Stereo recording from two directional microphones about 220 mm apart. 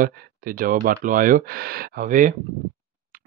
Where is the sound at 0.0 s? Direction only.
40° right (ahead or behind).